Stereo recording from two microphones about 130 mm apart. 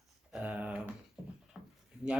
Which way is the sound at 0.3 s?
10° right (ahead or behind).